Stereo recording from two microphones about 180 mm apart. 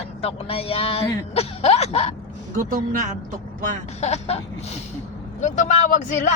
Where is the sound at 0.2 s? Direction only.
35° left (ahead or behind).